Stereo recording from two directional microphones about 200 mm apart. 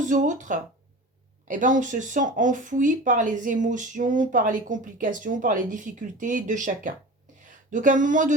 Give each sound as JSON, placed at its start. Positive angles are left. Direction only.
{"t": 0.0, "sound": "speech", "side_deg": -40}